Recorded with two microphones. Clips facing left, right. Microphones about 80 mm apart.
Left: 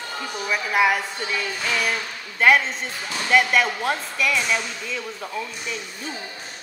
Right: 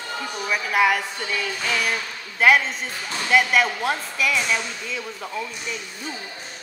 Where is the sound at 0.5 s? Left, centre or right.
Centre.